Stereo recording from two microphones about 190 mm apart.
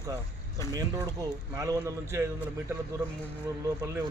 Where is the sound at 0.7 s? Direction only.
20° right (ahead or behind).